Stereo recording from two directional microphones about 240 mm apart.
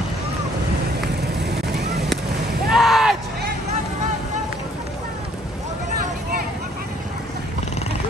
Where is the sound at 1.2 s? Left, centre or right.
Right.